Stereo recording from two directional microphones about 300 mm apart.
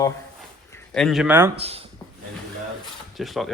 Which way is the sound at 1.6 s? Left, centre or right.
Centre.